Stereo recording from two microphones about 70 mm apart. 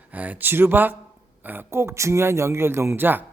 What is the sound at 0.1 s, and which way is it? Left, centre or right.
A man's voice, right.